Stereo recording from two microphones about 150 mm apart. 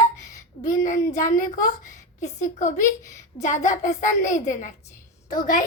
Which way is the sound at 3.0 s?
20° left (ahead or behind).